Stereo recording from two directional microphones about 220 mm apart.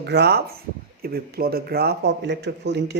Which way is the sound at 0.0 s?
50° right (ahead or behind).